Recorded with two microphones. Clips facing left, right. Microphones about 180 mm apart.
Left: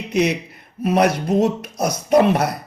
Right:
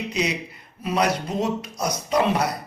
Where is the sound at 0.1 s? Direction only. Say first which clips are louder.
Left 12 dB; 55° left (ahead or behind).